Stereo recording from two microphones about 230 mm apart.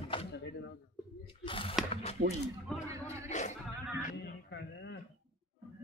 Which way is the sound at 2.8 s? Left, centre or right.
Centre.